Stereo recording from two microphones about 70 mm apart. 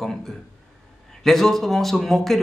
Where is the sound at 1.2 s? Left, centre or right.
Centre.